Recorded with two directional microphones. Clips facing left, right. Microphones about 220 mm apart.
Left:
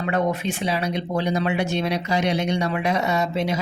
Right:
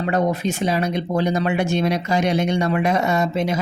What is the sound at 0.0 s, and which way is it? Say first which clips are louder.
Speech: right 3 dB; 40° right (ahead or behind).